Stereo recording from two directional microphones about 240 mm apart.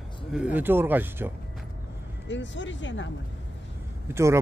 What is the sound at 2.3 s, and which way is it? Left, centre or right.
Speech, left.